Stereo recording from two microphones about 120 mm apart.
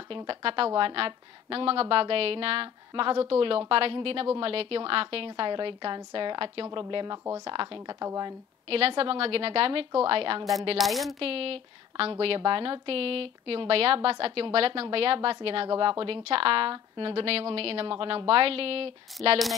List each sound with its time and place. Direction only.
0.3 s a woman's voice: 50° right (ahead or behind); by 8.4 s 30° right (ahead or behind)
8.6 s a woman's voice: 55° right (ahead or behind)
10.8 s speech: centre (ahead or behind)
11.1 s a woman's voice: 55° right (ahead or behind)